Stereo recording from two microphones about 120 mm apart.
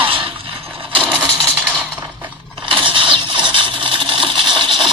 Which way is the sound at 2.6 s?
45° right (ahead or behind).